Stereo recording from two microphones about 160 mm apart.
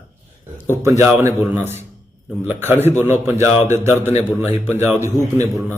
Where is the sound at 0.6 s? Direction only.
15° right (ahead or behind).